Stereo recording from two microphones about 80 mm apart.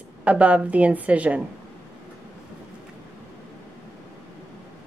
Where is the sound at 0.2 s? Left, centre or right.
Centre.